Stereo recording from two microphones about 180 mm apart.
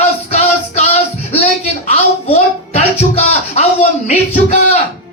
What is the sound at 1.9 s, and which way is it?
Music, 35° left (ahead or behind).